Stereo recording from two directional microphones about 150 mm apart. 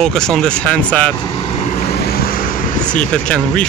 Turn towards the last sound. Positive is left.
turn(degrees=5)  # may be behind; listen again after turning